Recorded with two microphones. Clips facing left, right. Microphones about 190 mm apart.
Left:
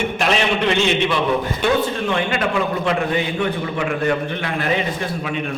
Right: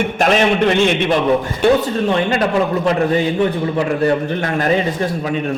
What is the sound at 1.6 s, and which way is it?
A man's voice, 35° right (ahead or behind).